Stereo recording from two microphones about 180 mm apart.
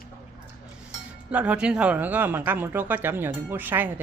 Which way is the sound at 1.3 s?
5° right (ahead or behind).